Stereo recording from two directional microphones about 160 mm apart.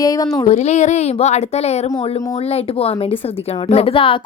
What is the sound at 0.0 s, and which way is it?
Speech, 20° left (ahead or behind).